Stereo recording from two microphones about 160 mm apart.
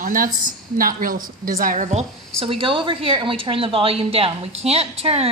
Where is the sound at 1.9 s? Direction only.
40° right (ahead or behind).